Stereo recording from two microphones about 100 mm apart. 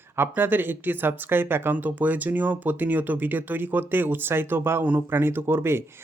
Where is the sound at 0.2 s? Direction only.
20° right (ahead or behind).